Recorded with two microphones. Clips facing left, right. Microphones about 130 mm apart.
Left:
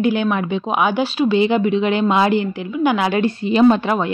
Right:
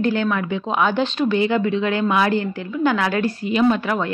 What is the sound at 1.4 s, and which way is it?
A woman's voice, 20° left (ahead or behind).